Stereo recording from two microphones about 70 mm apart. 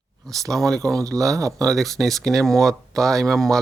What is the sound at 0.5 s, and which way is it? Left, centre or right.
Speech, centre.